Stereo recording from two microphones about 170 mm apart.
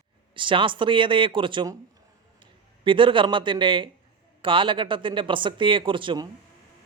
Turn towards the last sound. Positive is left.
turn(degrees=-25)  # may be behind; listen again after turning